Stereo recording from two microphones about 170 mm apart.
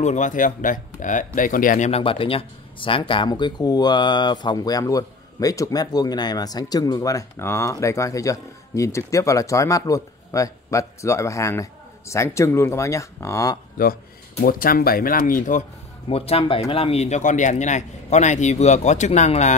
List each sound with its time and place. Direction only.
0.0 s speech: 45° left (ahead or behind)
1.9 s speech: 35° left (ahead or behind); by 13.6 s 20° left (ahead or behind)
14.4 s speech: 60° left (ahead or behind)
16.1 s speech: 35° left (ahead or behind)